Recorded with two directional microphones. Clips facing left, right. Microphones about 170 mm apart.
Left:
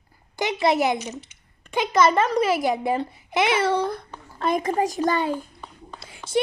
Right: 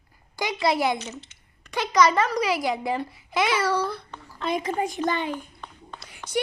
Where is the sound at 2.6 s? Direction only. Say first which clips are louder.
Left 3 dB; 20° left (ahead or behind).